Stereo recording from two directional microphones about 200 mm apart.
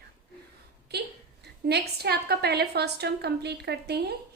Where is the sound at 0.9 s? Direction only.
55° right (ahead or behind).